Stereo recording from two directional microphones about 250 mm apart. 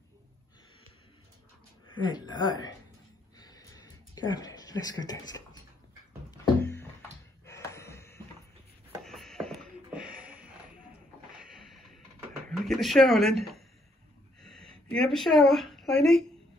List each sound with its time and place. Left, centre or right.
1.9 s speech: centre
3.3 s a sound: centre
9.0 s music: centre
11.3 s a sound: centre
12.4 s speech: centre
14.4 s speech: centre